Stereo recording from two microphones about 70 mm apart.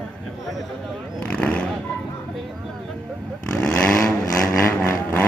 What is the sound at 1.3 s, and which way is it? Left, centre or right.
Roaring cats, centre.